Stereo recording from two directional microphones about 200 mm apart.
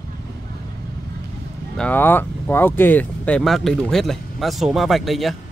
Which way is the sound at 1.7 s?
10° left (ahead or behind).